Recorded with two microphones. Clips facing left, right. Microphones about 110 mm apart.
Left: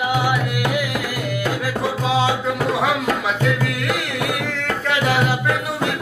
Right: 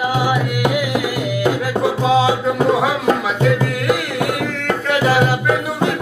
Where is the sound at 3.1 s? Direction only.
20° right (ahead or behind).